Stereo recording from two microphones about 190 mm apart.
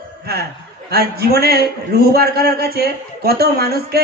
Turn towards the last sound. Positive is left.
turn(degrees=-55)  # may be behind; listen again after turning